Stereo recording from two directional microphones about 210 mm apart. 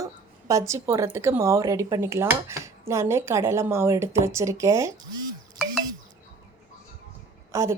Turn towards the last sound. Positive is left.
turn(degrees=-15)  # may be behind; listen again after turning